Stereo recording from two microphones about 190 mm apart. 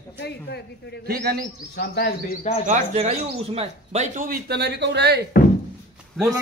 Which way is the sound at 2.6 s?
35° right (ahead or behind).